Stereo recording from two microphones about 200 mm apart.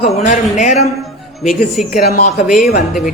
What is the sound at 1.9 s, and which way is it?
Speech, 40° left (ahead or behind).